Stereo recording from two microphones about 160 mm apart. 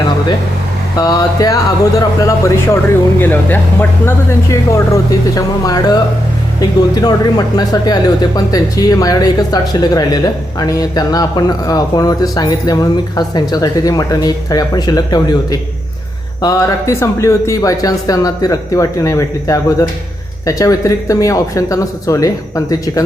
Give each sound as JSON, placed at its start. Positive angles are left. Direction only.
{"t": 0.9, "sound": "speech", "side_deg": 20}